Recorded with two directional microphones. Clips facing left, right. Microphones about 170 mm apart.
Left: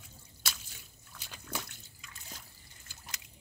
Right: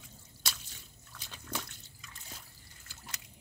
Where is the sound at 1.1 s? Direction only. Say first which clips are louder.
Even; 10° left (ahead or behind).